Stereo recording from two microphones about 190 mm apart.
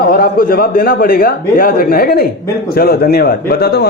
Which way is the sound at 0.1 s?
50° left (ahead or behind).